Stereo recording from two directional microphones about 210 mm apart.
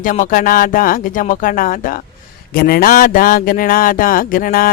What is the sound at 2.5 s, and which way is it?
Speech, 45° left (ahead or behind).